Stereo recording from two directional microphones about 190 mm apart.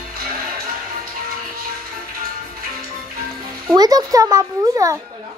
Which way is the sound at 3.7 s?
20° right (ahead or behind).